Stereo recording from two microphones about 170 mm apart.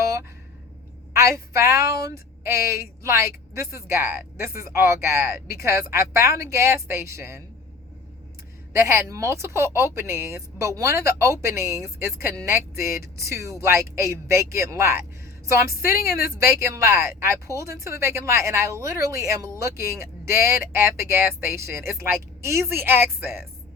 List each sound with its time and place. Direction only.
1.1 s speech: 15° right (ahead or behind)
8.7 s speech: 15° right (ahead or behind)